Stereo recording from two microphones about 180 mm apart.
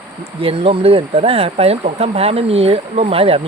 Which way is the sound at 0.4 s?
30° right (ahead or behind).